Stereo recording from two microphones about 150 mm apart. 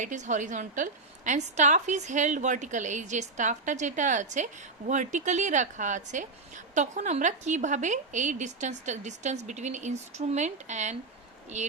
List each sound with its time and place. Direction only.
0.0 s a woman's voice: 55° right (ahead or behind)